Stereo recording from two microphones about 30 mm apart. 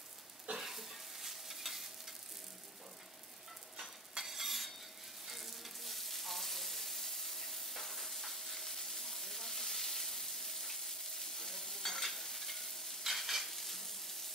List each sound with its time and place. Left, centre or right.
0.6 s stir: centre
4.2 s stir: centre
5.3 s frying: centre
7.1 s stir: centre
13.0 s stir: centre